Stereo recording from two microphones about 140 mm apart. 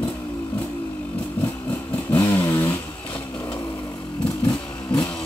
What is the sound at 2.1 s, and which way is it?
Vehicle, 15° left (ahead or behind).